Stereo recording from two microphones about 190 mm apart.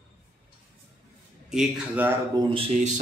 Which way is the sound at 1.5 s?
5° right (ahead or behind).